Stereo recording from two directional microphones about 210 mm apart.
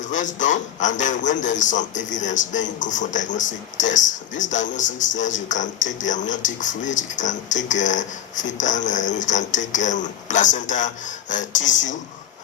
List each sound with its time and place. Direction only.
0.1 s speech: 35° left (ahead or behind)